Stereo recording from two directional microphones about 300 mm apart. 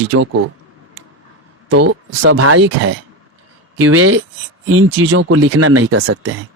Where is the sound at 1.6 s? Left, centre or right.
Right.